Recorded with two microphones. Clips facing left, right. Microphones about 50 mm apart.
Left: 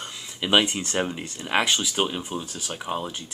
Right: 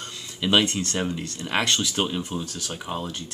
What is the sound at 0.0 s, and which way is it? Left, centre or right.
Speech, centre.